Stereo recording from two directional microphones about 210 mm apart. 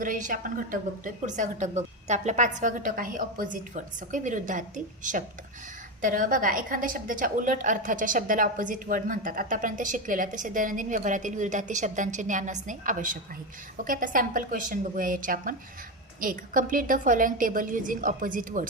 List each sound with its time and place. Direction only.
0.0 s a woman's voice: 40° right (ahead or behind)